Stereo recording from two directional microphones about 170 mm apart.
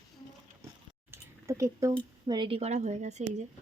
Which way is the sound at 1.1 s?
15° right (ahead or behind).